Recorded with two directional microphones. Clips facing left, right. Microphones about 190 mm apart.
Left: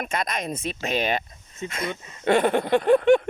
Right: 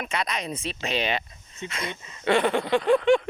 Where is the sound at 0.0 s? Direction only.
45° left (ahead or behind).